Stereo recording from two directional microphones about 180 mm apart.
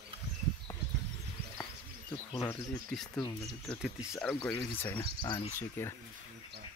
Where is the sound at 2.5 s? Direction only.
5° left (ahead or behind).